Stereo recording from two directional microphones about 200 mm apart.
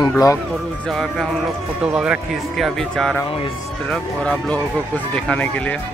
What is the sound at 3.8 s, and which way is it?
Speech, 5° left (ahead or behind).